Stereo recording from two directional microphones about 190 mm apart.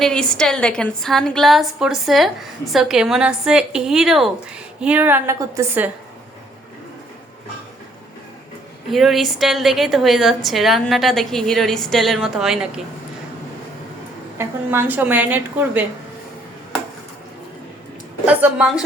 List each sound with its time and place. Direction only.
0.0 s a woman's voice: 5° left (ahead or behind); by 5.9 s 10° right (ahead or behind)
8.9 s a woman's voice: centre (ahead or behind)
14.3 s a woman's voice: 10° right (ahead or behind)
18.3 s a woman's voice: 5° right (ahead or behind)